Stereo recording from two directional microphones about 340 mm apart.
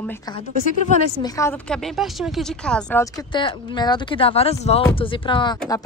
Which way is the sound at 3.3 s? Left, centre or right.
Centre.